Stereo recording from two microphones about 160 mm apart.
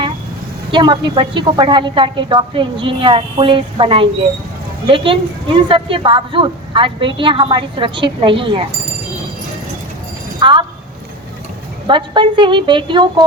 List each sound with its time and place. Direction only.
0.7 s a woman's voice: 30° right (ahead or behind)
10.4 s speech: 30° right (ahead or behind)
11.9 s a woman's voice: 30° right (ahead or behind)